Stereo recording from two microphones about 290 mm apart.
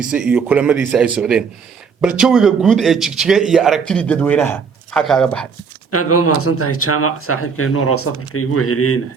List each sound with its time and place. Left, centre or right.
0.0 s a man's voice: centre
5.9 s speech: left